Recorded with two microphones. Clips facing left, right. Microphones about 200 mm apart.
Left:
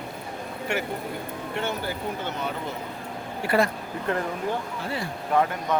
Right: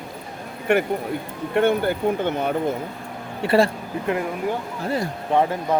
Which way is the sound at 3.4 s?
25° right (ahead or behind).